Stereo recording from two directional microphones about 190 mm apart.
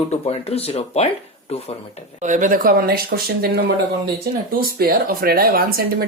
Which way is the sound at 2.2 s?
40° right (ahead or behind).